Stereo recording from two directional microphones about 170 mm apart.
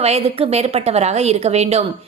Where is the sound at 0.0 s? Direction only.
35° right (ahead or behind).